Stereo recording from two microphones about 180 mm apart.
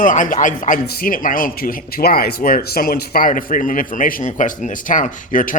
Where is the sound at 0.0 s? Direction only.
45° left (ahead or behind).